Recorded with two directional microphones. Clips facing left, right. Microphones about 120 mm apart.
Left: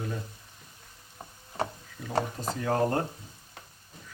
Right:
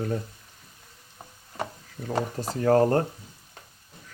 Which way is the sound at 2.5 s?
40° right (ahead or behind).